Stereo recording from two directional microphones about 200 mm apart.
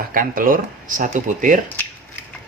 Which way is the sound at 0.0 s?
45° right (ahead or behind).